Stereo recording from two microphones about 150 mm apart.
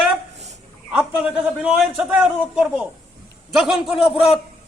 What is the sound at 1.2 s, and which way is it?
A man's voice, 5° right (ahead or behind).